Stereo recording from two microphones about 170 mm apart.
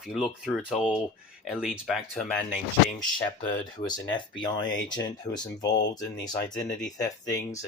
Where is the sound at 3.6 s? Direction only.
25° left (ahead or behind).